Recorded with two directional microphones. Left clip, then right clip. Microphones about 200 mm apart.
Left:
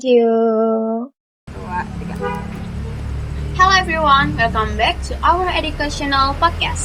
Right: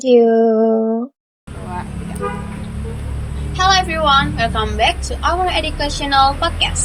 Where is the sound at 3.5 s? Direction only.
35° right (ahead or behind).